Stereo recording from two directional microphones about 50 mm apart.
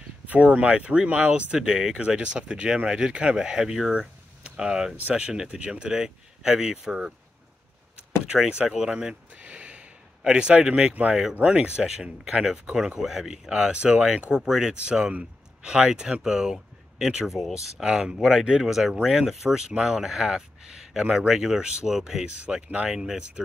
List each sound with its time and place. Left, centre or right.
0.3 s speech: right
8.4 s speech: centre
9.4 s a sound: right
11.4 s speech: right
22.2 s speech: right
22.9 s speech: centre